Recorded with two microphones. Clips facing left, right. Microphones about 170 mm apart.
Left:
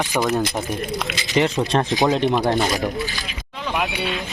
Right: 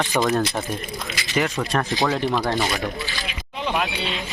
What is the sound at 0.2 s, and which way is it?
Speech, centre (ahead or behind).